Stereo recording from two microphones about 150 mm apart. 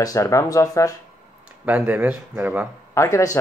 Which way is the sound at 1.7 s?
10° right (ahead or behind).